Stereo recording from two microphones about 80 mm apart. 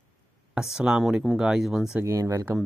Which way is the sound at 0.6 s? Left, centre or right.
Centre.